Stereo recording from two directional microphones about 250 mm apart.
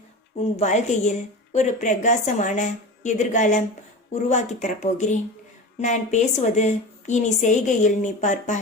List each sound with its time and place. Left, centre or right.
0.3 s a woman's voice: left